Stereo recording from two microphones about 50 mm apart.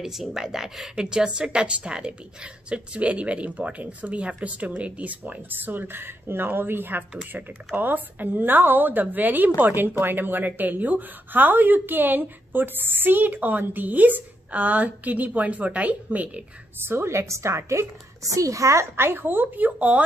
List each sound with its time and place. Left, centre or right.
0.0 s a woman's voice: centre; by 16.4 s right
16.8 s a woman's voice: right
18.3 s a woman's voice: right